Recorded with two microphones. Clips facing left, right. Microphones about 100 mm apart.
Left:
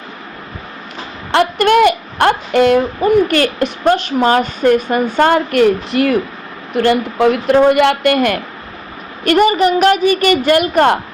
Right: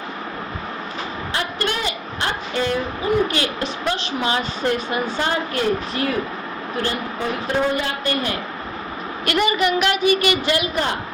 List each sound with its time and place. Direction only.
1.3 s a woman's voice: 70° left (ahead or behind)
9.2 s a woman's voice: 45° left (ahead or behind)